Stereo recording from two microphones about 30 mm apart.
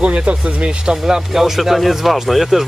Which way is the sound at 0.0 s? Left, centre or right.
Right.